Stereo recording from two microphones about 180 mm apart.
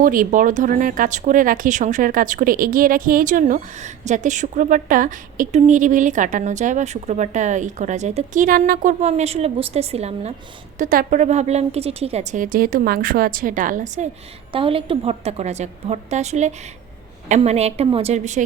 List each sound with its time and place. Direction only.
0.0 s a woman's voice: 50° right (ahead or behind)
10.8 s a woman's voice: 50° right (ahead or behind)
14.5 s a woman's voice: 30° right (ahead or behind)